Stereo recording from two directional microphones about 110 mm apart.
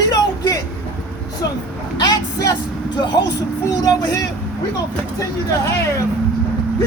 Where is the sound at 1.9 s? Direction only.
35° left (ahead or behind).